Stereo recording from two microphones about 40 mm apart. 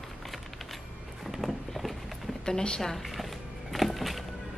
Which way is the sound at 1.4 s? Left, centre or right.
Centre.